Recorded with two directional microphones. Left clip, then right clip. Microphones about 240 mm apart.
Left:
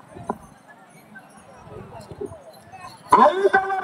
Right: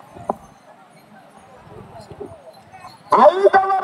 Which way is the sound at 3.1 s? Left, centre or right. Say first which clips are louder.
Right 4 dB; right.